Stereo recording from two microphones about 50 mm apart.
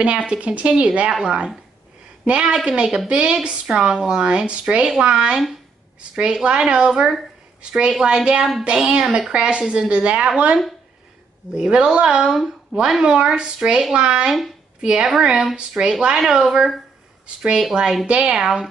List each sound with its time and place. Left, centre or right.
0.3 s a woman's voice: right; by 18.0 s centre
18.0 s a woman's voice: centre